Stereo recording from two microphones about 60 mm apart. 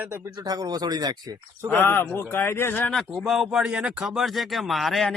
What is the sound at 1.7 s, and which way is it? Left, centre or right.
Speech, left.